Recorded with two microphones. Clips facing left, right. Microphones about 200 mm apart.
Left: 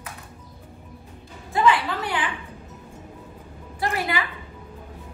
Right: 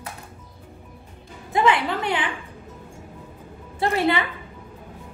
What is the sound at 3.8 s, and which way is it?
Speech, 25° right (ahead or behind).